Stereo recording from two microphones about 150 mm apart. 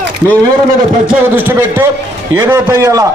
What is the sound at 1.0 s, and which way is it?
A man's voice, 15° right (ahead or behind).